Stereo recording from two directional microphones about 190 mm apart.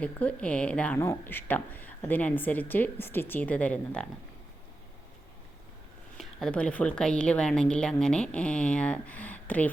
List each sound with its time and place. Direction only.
0.0 s speech: 5° left (ahead or behind)
6.1 s a woman's voice: 5° left (ahead or behind)